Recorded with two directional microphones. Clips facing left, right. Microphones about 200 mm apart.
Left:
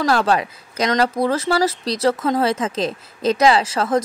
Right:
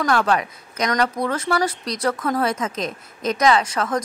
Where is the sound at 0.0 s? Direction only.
30° left (ahead or behind).